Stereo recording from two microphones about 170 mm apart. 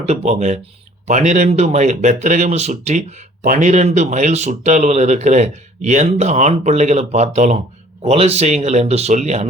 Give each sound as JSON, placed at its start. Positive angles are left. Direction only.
{"t": 0.0, "sound": "speech", "side_deg": -40}